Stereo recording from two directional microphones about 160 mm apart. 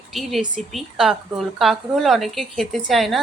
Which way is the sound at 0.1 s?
Centre (ahead or behind).